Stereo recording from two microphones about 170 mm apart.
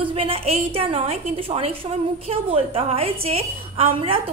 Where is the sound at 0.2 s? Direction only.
35° right (ahead or behind).